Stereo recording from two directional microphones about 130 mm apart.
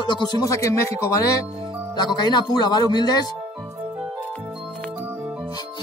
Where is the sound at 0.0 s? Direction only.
35° left (ahead or behind).